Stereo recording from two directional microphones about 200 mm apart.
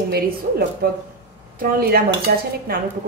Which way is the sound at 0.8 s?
50° right (ahead or behind).